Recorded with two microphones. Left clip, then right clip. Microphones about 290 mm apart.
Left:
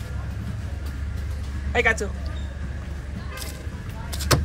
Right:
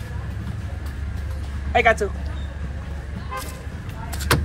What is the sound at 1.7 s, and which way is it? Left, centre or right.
Speech, right.